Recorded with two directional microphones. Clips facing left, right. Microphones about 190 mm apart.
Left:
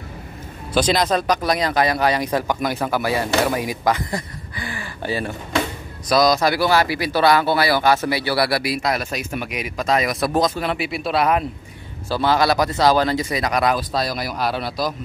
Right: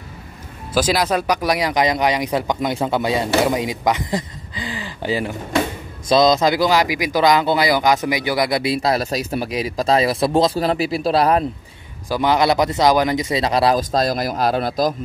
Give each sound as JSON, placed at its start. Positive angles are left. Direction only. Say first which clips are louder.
{"t": 0.7, "sound": "speech", "louder": "even", "side_deg": -5}
{"t": 12.1, "sound": "speech", "louder": "right 1 dB", "side_deg": -15}
{"t": 13.7, "sound": "a man's voice", "louder": "right 5 dB", "side_deg": -45}